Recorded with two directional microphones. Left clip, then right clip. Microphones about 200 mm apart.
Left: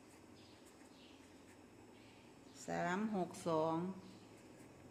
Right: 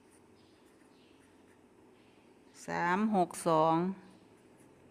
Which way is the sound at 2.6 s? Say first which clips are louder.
Right 9 dB; 55° right (ahead or behind).